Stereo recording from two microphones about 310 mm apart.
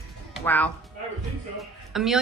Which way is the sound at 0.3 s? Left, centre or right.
Centre.